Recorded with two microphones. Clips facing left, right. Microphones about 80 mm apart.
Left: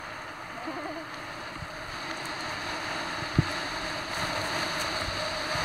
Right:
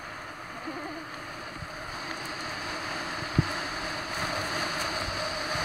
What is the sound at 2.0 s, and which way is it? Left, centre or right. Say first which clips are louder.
Vehicle: left 1 dB; left.